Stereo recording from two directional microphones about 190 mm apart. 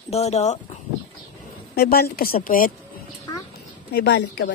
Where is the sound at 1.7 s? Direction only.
55° left (ahead or behind).